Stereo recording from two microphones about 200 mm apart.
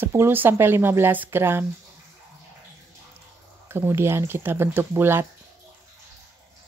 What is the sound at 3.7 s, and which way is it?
Speech, 10° right (ahead or behind).